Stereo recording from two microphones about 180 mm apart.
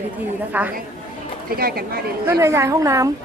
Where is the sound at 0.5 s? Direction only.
10° right (ahead or behind).